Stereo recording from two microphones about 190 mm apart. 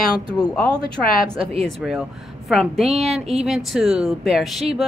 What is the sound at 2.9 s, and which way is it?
Speech, 35° right (ahead or behind).